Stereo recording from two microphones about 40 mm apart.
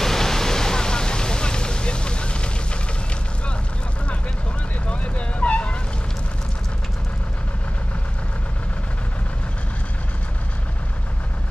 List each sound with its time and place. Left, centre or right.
0.0 s vehicle: centre; by 2.8 s left
4.8 s vehicle: left